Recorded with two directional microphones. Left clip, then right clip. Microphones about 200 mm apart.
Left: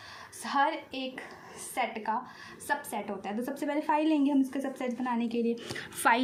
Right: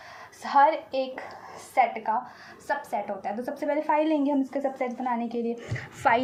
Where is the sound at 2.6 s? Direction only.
60° left (ahead or behind).